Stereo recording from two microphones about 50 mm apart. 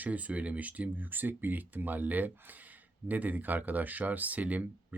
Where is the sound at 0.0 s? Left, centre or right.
Right.